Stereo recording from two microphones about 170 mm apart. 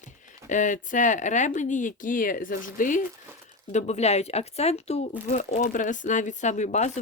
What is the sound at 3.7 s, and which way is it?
Speech, 40° left (ahead or behind).